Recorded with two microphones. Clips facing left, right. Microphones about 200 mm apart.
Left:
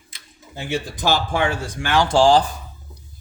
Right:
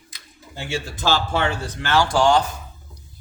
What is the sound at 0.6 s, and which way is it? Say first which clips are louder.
Speech: left 2 dB; 15° left (ahead or behind).